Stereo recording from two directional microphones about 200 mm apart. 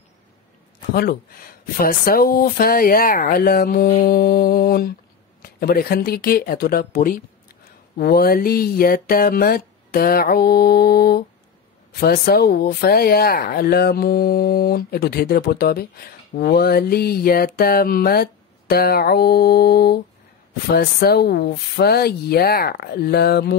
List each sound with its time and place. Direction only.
1.8 s speech: 45° left (ahead or behind)